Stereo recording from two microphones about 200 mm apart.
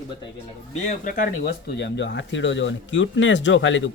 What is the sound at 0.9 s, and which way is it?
Speech, 40° left (ahead or behind).